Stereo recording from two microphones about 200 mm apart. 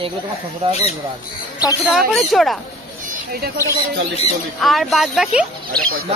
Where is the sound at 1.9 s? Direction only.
Centre (ahead or behind).